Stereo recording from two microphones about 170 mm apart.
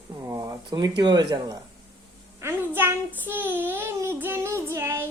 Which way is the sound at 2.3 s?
15° right (ahead or behind).